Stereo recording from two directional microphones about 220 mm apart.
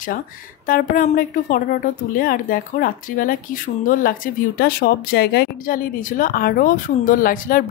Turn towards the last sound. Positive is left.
turn(degrees=40)  # may be behind; listen again after turning